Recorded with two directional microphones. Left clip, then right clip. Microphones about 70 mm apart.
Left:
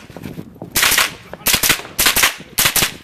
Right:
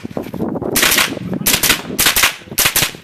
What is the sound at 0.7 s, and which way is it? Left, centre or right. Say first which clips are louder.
Cap gun: right 1 dB; centre.